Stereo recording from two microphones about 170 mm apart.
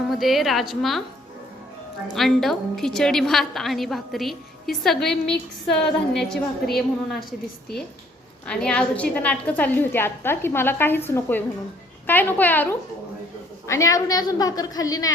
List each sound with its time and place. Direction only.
0.1 s a woman's voice: centre (ahead or behind)
2.1 s a woman's voice: centre (ahead or behind)
13.7 s a woman's voice: 20° left (ahead or behind)